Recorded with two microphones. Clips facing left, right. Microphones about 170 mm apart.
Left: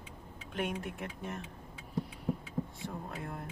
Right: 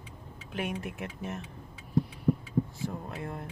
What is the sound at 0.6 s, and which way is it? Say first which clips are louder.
Speech: right 2 dB; centre (ahead or behind).